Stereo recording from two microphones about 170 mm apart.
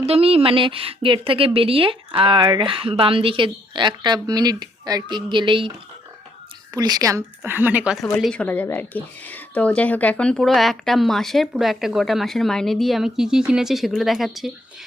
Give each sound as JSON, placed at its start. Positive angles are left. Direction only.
{"t": 0.0, "sound": "a woman's voice", "side_deg": -35}
{"t": 6.7, "sound": "a woman's voice", "side_deg": -25}
{"t": 8.1, "sound": "speech", "side_deg": 5}